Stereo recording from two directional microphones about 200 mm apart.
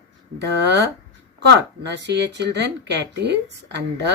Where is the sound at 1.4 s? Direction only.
60° right (ahead or behind).